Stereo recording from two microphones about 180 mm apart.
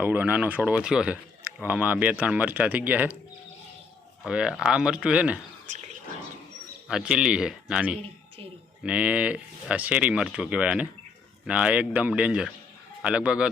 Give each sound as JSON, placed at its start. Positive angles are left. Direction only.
{"t": 0.0, "sound": "a man's voice", "side_deg": -10}
{"t": 4.2, "sound": "speech", "side_deg": -5}
{"t": 5.6, "sound": "a sound", "side_deg": -40}
{"t": 6.8, "sound": "a man's voice", "side_deg": -5}